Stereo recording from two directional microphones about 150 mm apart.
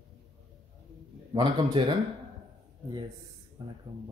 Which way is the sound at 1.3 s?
35° right (ahead or behind).